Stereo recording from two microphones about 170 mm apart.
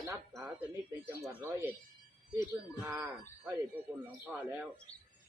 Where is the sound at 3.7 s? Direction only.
10° right (ahead or behind).